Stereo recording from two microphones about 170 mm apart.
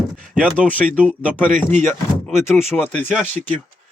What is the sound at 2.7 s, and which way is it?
Speech, 10° left (ahead or behind).